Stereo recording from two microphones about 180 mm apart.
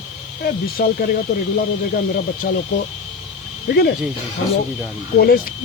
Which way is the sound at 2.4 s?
60° left (ahead or behind).